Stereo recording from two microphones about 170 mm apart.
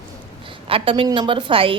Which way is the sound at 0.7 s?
30° right (ahead or behind).